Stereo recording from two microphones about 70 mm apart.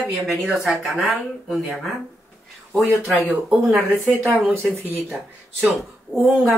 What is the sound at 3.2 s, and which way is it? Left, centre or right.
Speech, centre.